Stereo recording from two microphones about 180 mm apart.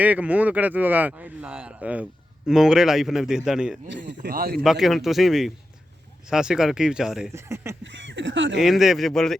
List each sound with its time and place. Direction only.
0.0 s a man's voice: 10° right (ahead or behind)
3.8 s speech: 85° right; by 4.6 s 60° right (ahead or behind)
4.6 s a man's voice: centre (ahead or behind)
7.3 s speech: 15° right (ahead or behind)
7.9 s speech: 90° right
8.5 s a man's voice: centre (ahead or behind)